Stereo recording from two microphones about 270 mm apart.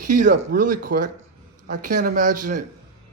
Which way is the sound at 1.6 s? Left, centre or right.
Right.